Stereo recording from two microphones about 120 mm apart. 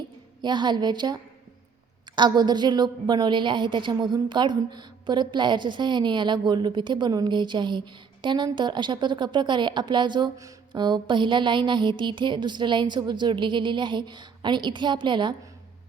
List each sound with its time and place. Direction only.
0.4 s a woman's voice: 40° right (ahead or behind)